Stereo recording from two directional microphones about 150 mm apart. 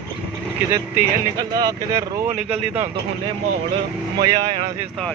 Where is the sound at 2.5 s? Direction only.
45° right (ahead or behind).